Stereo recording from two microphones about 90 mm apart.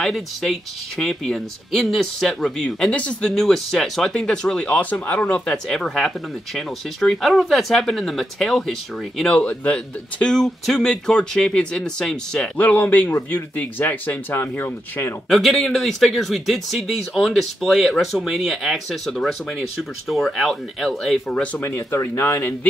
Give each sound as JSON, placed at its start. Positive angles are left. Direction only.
{"t": 0.0, "sound": "speech", "side_deg": 0}
{"t": 9.2, "sound": "speech", "side_deg": 15}
{"t": 12.5, "sound": "speech", "side_deg": 20}
{"t": 15.2, "sound": "speech", "side_deg": 0}
{"t": 21.5, "sound": "speech", "side_deg": 30}